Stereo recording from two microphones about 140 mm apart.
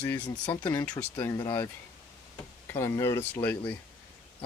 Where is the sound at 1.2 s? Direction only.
20° left (ahead or behind).